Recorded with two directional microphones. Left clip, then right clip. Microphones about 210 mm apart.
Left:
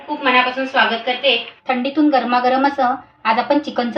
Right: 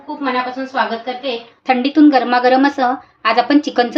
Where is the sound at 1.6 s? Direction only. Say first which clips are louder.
Right 7 dB; 50° right (ahead or behind).